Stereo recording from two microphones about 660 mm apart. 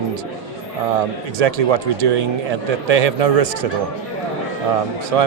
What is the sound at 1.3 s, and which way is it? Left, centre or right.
Speech, right.